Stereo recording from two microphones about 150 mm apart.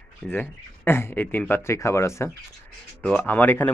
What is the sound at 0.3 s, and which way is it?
Speech, 15° left (ahead or behind).